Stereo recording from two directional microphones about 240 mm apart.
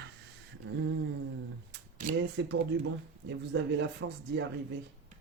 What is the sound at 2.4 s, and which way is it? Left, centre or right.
Speech, right.